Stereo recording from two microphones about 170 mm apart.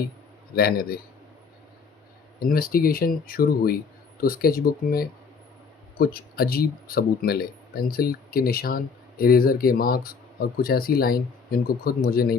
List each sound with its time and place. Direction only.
0.5 s speech: 60° left (ahead or behind)
2.4 s speech: 60° left (ahead or behind)